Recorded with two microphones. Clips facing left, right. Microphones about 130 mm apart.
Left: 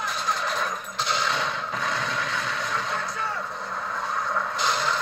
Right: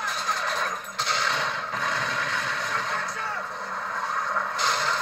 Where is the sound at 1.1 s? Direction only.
15° left (ahead or behind).